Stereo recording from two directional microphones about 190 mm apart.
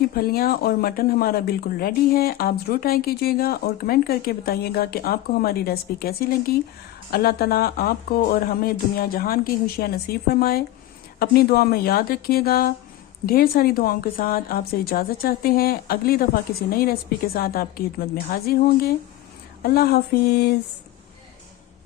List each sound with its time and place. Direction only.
0.1 s speech: 55° left (ahead or behind)